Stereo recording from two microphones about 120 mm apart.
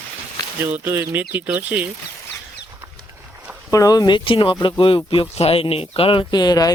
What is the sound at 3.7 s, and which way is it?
Speech, 30° left (ahead or behind).